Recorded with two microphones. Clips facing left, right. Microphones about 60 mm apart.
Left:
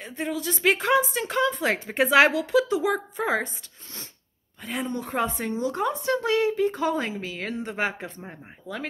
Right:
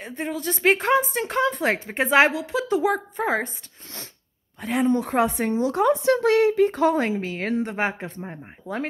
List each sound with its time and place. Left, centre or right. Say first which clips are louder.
0.0 s speech: right 1 dB; right
0.7 s speech: right 2 dB; right
1.9 s a woman's voice: even; right
2.7 s speech: right 3 dB; right
3.4 s a woman's voice: right 3 dB; right
7.7 s speech: right 2 dB; right
8.7 s speech: right 5 dB; right